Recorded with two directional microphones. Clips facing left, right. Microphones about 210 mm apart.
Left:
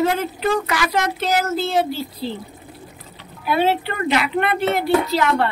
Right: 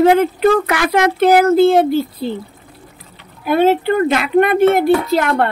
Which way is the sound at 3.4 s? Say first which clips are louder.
Right 7 dB; 50° right (ahead or behind).